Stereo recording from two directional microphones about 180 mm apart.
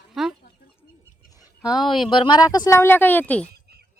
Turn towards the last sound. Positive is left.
turn(degrees=10)  # may be behind; listen again after turning